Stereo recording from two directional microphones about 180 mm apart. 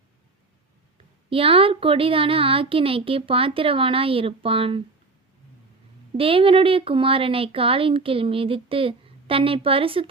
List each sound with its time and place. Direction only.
1.3 s speech: 30° right (ahead or behind)
6.1 s speech: 30° right (ahead or behind)